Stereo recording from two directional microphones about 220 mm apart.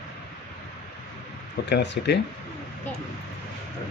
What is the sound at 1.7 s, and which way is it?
Speech, 50° left (ahead or behind).